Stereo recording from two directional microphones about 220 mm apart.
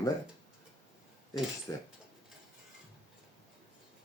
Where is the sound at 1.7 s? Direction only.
15° left (ahead or behind).